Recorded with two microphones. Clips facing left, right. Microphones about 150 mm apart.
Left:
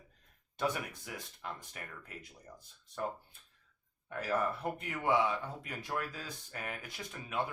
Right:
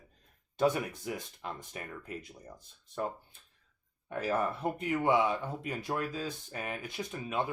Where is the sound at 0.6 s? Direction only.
25° right (ahead or behind).